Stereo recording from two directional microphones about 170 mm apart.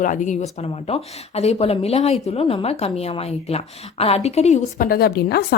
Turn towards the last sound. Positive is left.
turn(degrees=65)  # may be behind; listen again after turning